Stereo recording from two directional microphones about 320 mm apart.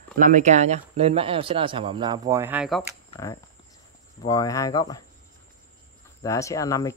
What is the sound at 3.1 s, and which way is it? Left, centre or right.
Speech, centre.